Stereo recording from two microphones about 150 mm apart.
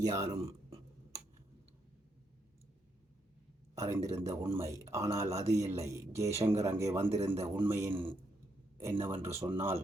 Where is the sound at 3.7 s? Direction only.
20° right (ahead or behind).